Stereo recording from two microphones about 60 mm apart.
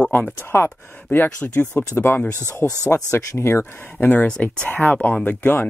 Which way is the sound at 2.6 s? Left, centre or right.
Left.